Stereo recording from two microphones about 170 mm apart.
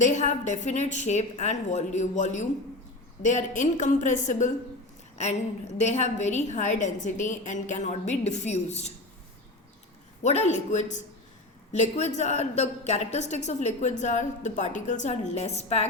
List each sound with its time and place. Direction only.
0.0 s a woman's voice: 45° left (ahead or behind)
10.2 s a woman's voice: 40° left (ahead or behind)